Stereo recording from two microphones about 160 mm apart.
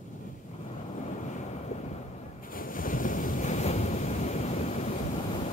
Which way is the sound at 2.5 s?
60° left (ahead or behind).